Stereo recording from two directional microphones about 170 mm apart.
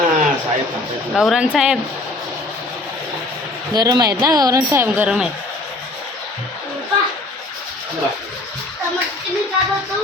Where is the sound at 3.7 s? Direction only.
25° right (ahead or behind); by 5.2 s 10° right (ahead or behind).